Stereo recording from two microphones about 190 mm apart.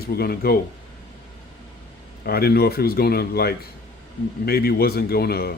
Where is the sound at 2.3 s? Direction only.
55° left (ahead or behind).